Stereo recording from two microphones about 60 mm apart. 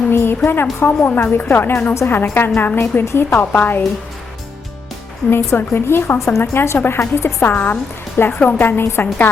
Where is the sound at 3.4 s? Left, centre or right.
Left.